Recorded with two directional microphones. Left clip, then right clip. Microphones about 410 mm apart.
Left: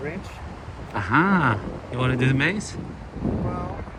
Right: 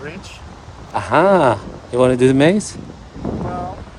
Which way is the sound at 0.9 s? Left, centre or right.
Centre.